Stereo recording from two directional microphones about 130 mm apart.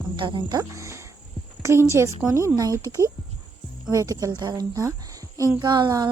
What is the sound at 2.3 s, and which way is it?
Speech, 25° right (ahead or behind).